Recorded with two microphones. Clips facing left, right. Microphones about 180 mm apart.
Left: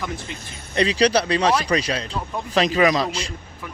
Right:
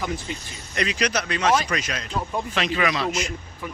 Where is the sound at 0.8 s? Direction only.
30° left (ahead or behind).